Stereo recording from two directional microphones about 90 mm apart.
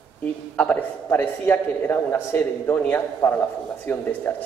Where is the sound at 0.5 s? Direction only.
20° left (ahead or behind).